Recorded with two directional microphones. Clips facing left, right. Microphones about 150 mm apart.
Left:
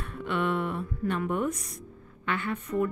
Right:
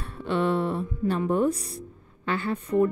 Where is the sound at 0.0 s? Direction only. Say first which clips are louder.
Right 4 dB; 30° right (ahead or behind).